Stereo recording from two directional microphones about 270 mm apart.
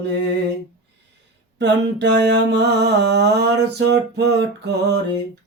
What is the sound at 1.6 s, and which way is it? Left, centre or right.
Mantra, right.